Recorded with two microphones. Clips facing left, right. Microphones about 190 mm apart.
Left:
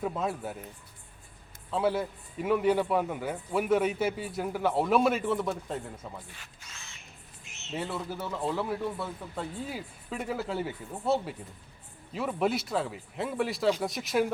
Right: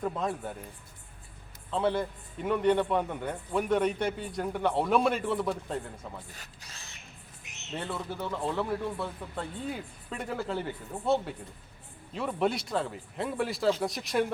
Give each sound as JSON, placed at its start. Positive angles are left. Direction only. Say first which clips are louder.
{"t": 0.0, "sound": "a man's voice", "louder": "even", "side_deg": 5}
{"t": 1.7, "sound": "a man's voice", "louder": "even", "side_deg": 5}
{"t": 6.3, "sound": "speech", "louder": "right 1 dB", "side_deg": -40}
{"t": 7.4, "sound": "bird", "louder": "right 1 dB", "side_deg": -20}
{"t": 7.7, "sound": "a man's voice", "louder": "left 1 dB", "side_deg": 5}